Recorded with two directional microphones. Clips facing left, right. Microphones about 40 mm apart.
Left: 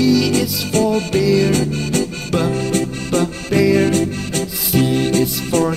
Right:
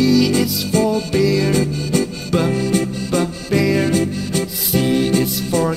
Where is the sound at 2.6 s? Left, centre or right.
Left.